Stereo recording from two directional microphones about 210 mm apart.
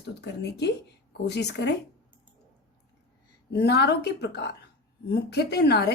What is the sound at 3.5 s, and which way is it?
Speech, 50° left (ahead or behind).